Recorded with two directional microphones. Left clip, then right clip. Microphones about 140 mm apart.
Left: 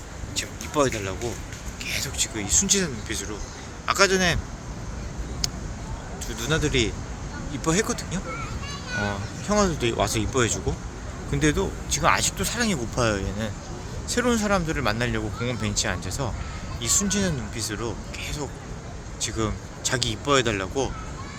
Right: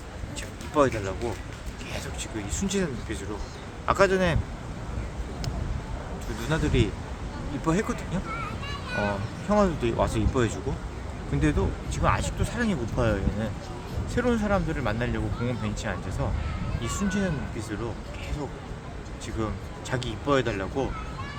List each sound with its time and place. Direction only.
0.3 s a sound: 20° left (ahead or behind)
1.8 s speech: 15° left (ahead or behind)
6.4 s speech: 5° left (ahead or behind)
11.3 s a man's voice: 25° left (ahead or behind)
11.9 s speech: 45° left (ahead or behind)